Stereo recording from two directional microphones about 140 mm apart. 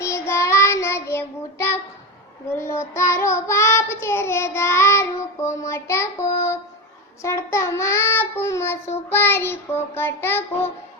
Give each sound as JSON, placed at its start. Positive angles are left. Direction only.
{"t": 0.0, "sound": "child singing", "side_deg": 20}